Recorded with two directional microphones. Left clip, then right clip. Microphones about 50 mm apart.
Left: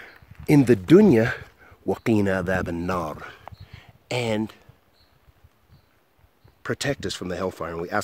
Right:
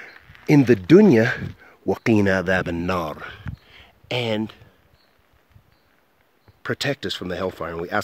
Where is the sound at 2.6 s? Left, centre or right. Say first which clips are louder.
Right 3 dB; right.